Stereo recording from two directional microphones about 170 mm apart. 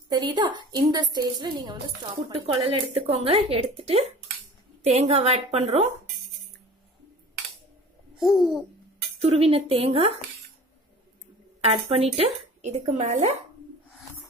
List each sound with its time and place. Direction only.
0.1 s a woman's voice: 25° right (ahead or behind)
8.2 s babbling: centre (ahead or behind)
9.2 s a woman's voice: 35° right (ahead or behind)
12.2 s speech: 45° right (ahead or behind)